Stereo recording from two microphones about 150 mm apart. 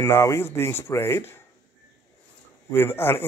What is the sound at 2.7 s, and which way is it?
Speech, 15° left (ahead or behind).